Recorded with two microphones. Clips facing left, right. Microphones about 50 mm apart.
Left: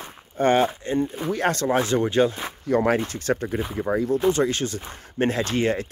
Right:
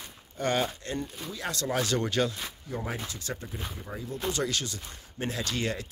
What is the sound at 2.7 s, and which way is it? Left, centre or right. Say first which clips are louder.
Speech: left 16 dB; left.